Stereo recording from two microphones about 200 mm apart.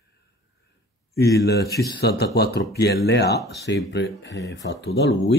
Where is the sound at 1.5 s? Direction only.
50° left (ahead or behind).